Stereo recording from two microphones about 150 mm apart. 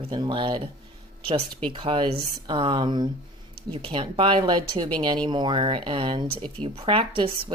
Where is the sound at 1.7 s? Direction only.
35° right (ahead or behind).